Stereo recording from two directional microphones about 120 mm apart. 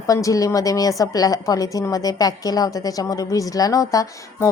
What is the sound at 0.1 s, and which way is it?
A woman's voice, 30° left (ahead or behind).